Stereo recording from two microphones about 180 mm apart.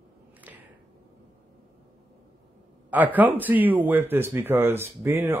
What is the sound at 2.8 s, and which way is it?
Speech, 10° right (ahead or behind).